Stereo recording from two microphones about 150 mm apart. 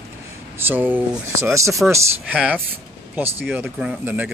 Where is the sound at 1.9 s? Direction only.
10° right (ahead or behind).